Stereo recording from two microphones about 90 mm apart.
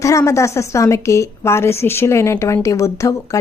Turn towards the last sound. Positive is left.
turn(degrees=35)  # may be behind; listen again after turning